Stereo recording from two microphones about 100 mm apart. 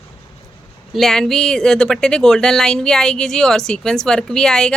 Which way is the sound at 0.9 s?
5° left (ahead or behind).